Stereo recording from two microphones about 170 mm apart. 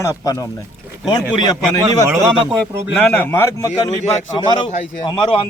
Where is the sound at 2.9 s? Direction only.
10° left (ahead or behind).